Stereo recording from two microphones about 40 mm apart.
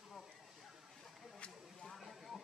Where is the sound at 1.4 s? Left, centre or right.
Left.